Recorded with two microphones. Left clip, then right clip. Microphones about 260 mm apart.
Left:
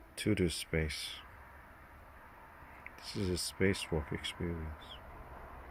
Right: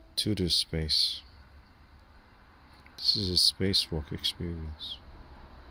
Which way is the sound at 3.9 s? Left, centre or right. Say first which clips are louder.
Even; centre.